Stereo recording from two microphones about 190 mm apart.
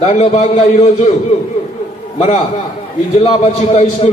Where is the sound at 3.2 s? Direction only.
30° left (ahead or behind).